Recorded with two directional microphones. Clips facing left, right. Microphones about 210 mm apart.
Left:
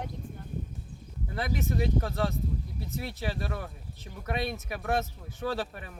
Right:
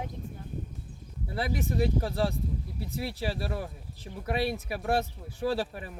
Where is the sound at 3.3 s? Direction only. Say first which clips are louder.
Right 1 dB; 35° right (ahead or behind).